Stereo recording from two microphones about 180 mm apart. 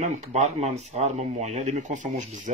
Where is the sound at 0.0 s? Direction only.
40° right (ahead or behind).